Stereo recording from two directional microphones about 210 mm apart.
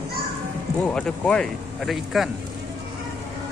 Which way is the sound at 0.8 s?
5° left (ahead or behind).